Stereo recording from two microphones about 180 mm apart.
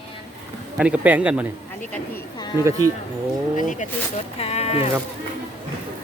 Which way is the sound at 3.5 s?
45° left (ahead or behind).